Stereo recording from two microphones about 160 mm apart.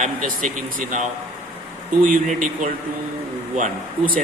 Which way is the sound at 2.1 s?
55° right (ahead or behind).